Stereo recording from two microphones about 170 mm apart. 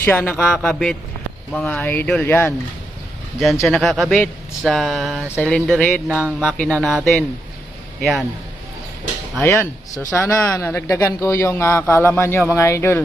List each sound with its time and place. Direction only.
0.0 s a man's voice: 10° left (ahead or behind)
3.4 s speech: centre (ahead or behind)
9.4 s a man's voice: 15° left (ahead or behind)